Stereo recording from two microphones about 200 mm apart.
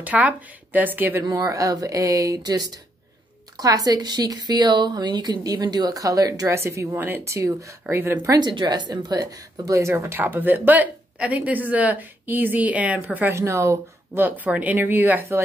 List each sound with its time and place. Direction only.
0.0 s a woman's voice: 5° right (ahead or behind)